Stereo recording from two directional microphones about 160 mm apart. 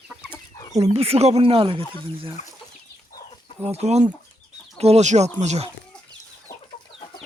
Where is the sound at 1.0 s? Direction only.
40° right (ahead or behind).